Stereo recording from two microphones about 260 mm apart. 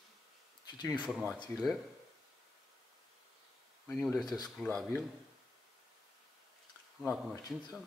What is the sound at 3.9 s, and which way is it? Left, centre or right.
Speech, centre.